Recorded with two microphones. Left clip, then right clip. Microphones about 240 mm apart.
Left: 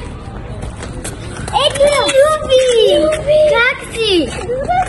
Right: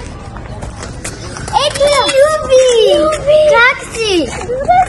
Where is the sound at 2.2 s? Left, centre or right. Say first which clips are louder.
Right 3 dB; centre.